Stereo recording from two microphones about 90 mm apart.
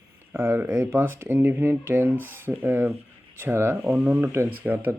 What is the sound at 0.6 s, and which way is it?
Speech, 15° right (ahead or behind).